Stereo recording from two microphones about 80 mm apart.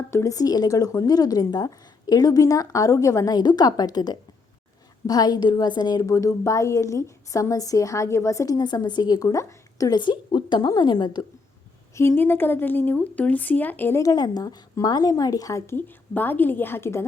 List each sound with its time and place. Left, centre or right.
0.1 s a woman's voice: left
0.3 s a woman's voice: left
6.1 s a woman's voice: left
8.5 s a woman's voice: left
9.9 s a woman's voice: left
10.7 s a woman's voice: left
11.9 s speech: left
14.0 s a woman's voice: left